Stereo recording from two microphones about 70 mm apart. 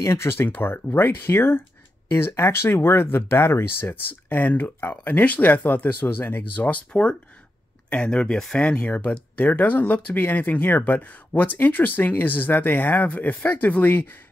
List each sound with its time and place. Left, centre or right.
0.0 s speech: left